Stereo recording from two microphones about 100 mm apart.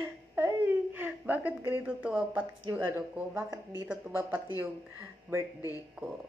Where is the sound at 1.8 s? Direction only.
15° right (ahead or behind).